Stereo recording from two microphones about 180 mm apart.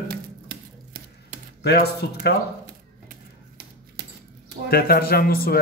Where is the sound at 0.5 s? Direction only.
55° right (ahead or behind).